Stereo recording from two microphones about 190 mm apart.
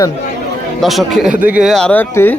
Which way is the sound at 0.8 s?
Centre (ahead or behind).